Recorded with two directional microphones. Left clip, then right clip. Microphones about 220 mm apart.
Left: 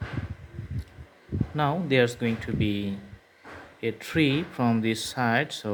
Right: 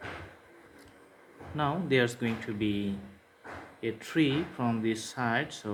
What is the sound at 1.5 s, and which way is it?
Speech, 35° left (ahead or behind).